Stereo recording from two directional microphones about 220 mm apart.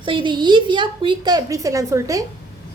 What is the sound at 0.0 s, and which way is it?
A woman's voice, 20° right (ahead or behind).